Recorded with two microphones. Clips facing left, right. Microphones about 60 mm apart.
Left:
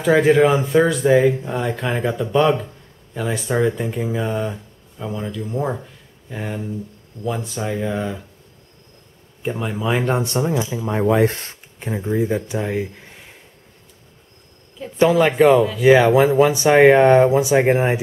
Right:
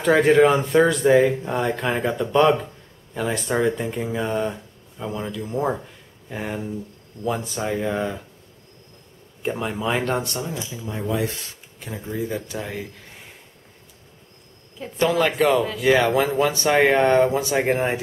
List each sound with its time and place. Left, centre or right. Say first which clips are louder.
0.0 s speech: left 1 dB; centre
9.4 s speech: left 1 dB; centre
10.2 s speech: left 8 dB; left
10.5 s speech: left 9 dB; left
11.9 s speech: left 7 dB; left
15.0 s speech: left 5 dB; centre
15.3 s speech: left 6 dB; centre
15.8 s speech: left 6 dB; centre